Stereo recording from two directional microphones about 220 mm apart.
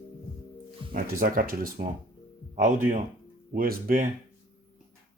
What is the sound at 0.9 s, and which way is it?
Speech, 40° right (ahead or behind).